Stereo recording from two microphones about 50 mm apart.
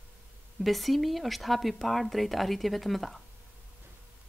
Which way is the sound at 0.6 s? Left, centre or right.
Centre.